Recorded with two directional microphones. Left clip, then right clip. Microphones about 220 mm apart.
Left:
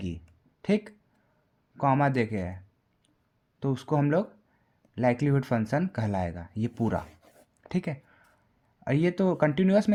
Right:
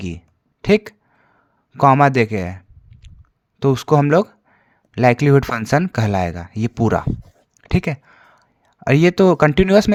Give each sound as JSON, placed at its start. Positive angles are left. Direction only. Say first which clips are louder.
{"t": 0.6, "sound": "speech", "louder": "right 13 dB", "side_deg": -30}
{"t": 7.7, "sound": "a sound", "louder": "right 12 dB", "side_deg": -30}
{"t": 8.8, "sound": "speech", "louder": "right 13 dB", "side_deg": -30}